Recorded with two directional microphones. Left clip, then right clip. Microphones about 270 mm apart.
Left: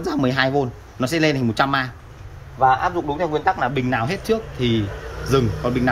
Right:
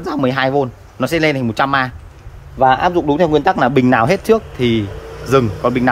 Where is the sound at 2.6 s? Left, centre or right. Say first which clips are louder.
Right 5 dB; right; by 5.9 s centre.